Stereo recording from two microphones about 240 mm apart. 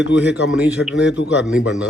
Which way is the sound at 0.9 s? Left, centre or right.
Left.